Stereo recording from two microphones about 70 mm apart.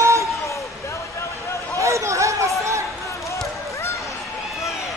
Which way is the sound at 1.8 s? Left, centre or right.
Right.